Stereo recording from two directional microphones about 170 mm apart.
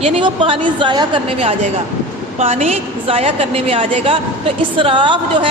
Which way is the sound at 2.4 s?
40° right (ahead or behind).